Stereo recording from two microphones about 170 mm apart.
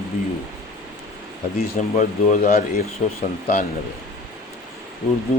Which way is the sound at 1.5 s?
50° left (ahead or behind).